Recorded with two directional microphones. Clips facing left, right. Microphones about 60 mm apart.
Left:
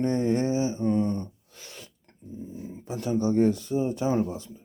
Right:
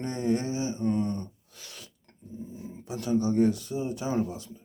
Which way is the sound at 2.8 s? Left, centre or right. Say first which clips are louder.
Left 1 dB; left.